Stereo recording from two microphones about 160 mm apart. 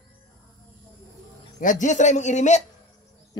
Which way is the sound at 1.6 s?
50° left (ahead or behind).